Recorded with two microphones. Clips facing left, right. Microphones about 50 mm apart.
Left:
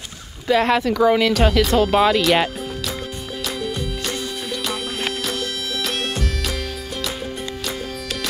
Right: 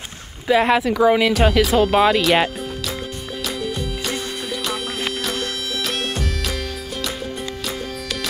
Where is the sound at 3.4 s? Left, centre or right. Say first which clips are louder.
Even; centre.